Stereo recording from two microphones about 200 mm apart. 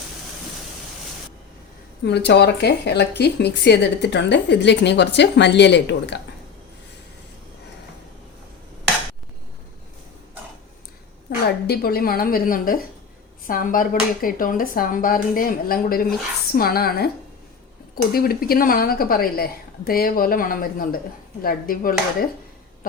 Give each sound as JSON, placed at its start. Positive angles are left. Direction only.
{"t": 2.0, "sound": "speech", "side_deg": 55}
{"t": 11.4, "sound": "speech", "side_deg": 50}